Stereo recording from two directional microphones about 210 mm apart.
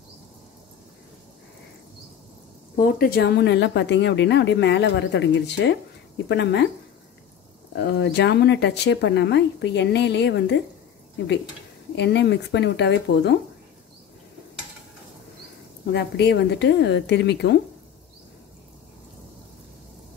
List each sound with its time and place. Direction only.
2.7 s a woman's voice: 45° left (ahead or behind)
7.7 s speech: 55° left (ahead or behind)
11.9 s a woman's voice: 55° left (ahead or behind)
15.9 s speech: 55° left (ahead or behind)